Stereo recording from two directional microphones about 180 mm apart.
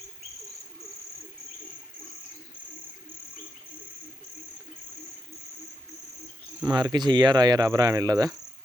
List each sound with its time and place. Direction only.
6.7 s speech: 20° right (ahead or behind)